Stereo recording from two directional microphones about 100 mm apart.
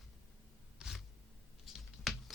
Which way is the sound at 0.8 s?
Centre (ahead or behind).